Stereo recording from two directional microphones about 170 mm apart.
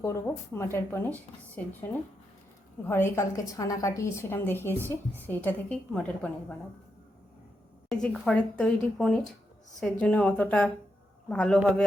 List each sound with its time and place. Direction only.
0.0 s a woman's voice: 15° left (ahead or behind)
2.8 s a woman's voice: 15° left (ahead or behind)
7.9 s a woman's voice: 5° left (ahead or behind)